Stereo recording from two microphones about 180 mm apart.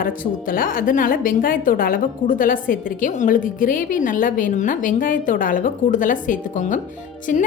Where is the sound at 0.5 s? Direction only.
50° left (ahead or behind).